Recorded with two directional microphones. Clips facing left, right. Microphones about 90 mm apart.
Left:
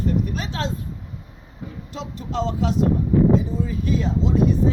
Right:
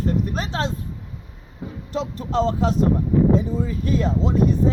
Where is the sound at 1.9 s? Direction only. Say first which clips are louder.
Right 5 dB; 40° right (ahead or behind).